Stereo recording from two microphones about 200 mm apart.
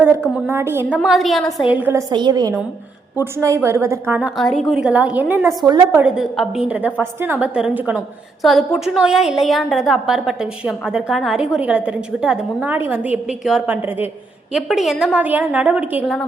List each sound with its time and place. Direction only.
0.0 s a woman's voice: 10° right (ahead or behind)
1.0 s a woman's voice: centre (ahead or behind)
1.5 s a woman's voice: 15° left (ahead or behind)
1.7 s a woman's voice: 10° right (ahead or behind)